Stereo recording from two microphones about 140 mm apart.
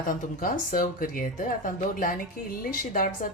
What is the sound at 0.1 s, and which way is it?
Speech, 75° left (ahead or behind).